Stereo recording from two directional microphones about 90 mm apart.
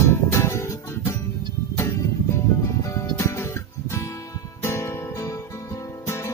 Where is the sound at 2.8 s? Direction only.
35° left (ahead or behind).